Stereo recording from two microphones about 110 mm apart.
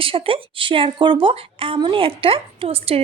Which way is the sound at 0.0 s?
55° right (ahead or behind).